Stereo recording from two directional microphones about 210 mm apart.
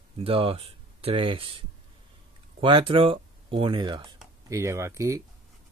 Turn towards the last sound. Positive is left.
turn(degrees=-15)  # may be behind; listen again after turning